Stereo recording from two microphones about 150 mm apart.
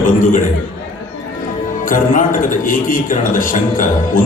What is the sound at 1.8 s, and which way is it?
A man's voice, 65° left (ahead or behind).